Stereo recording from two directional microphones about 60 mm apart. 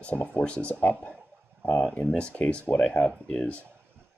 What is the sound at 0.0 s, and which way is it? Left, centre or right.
Speech, left.